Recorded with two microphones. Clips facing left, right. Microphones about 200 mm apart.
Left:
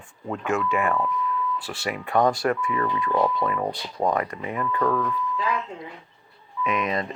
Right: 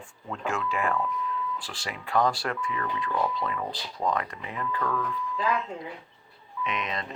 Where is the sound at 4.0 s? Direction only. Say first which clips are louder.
Left 5 dB; 50° left (ahead or behind).